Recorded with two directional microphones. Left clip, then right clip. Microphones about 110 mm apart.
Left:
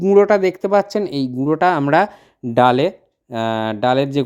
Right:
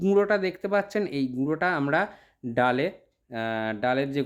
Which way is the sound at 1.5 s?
65° left (ahead or behind).